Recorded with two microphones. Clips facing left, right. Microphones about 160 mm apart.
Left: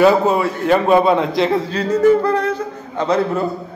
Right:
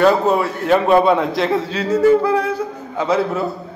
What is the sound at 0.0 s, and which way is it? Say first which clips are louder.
A man's voice: left 1 dB; centre (ahead or behind).